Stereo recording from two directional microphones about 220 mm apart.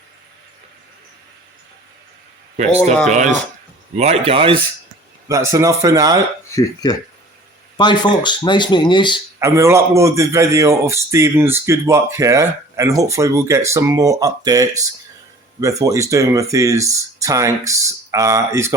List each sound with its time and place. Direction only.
3.1 s speech: 35° right (ahead or behind)
5.3 s a man's voice: 15° right (ahead or behind)
6.5 s speech: 15° left (ahead or behind)
9.4 s a man's voice: 10° right (ahead or behind)